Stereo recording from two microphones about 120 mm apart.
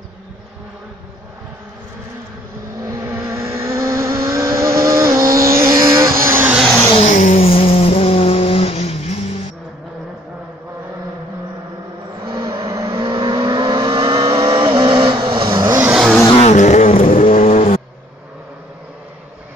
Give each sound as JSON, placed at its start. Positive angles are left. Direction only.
{"t": 2.8, "sound": "vehicle", "side_deg": -25}
{"t": 6.9, "sound": "vehicle", "side_deg": 70}
{"t": 7.4, "sound": "vehicle", "side_deg": 55}
{"t": 12.4, "sound": "vehicle", "side_deg": -30}
{"t": 14.8, "sound": "vehicle", "side_deg": -45}
{"t": 15.9, "sound": "vehicle", "side_deg": 0}
{"t": 16.3, "sound": "vehicle", "side_deg": 75}